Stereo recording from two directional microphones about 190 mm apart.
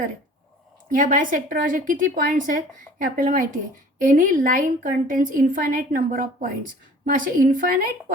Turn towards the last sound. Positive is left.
turn(degrees=-45)  # may be behind; listen again after turning